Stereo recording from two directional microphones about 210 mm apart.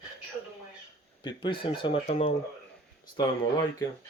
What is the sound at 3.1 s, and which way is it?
Speech, 15° left (ahead or behind).